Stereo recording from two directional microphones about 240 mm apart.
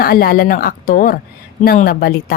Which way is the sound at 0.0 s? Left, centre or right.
Left.